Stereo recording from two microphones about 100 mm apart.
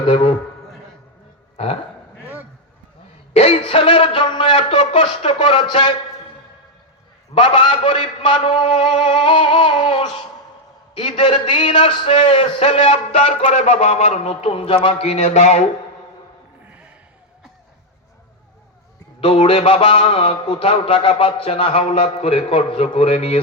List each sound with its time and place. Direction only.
0.1 s speech: 55° left (ahead or behind)
1.5 s speech: 90° left
2.2 s honk: 15° right (ahead or behind)
3.3 s a man's voice: 90° left; by 5.9 s 55° left (ahead or behind)
7.3 s a man's voice: 55° left (ahead or behind); by 13.3 s 90° left
13.8 s a sound: 90° left
16.6 s a sound: 15° right (ahead or behind)
19.2 s a man's voice: 70° left (ahead or behind)